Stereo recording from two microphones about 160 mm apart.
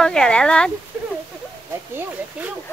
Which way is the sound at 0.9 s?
10° right (ahead or behind).